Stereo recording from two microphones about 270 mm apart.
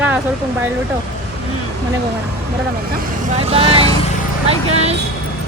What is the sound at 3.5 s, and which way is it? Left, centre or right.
Speech, right.